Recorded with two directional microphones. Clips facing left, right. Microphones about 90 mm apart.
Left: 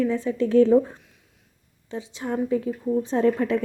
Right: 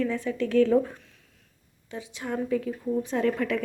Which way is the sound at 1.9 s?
25° left (ahead or behind).